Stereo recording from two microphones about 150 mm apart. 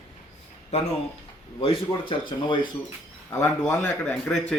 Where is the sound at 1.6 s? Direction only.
40° left (ahead or behind).